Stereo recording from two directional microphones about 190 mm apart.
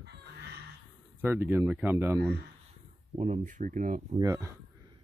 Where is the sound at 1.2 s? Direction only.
10° right (ahead or behind).